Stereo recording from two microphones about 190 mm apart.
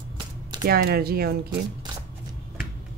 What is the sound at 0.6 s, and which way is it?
Speech, 55° right (ahead or behind).